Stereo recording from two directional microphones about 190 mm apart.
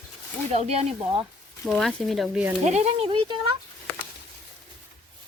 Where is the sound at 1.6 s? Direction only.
Centre (ahead or behind).